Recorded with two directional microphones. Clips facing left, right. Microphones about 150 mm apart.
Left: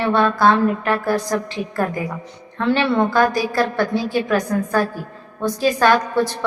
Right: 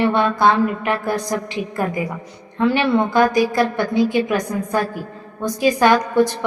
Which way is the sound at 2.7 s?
15° right (ahead or behind).